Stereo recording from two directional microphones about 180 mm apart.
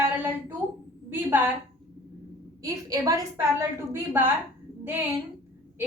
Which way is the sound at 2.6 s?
20° right (ahead or behind).